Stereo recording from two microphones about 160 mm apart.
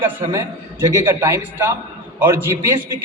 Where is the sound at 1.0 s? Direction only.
15° right (ahead or behind).